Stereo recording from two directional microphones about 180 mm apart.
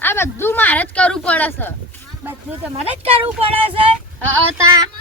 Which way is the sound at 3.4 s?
30° right (ahead or behind).